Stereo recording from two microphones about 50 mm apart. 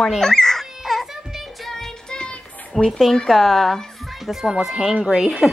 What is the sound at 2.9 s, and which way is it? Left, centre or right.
Speech, centre.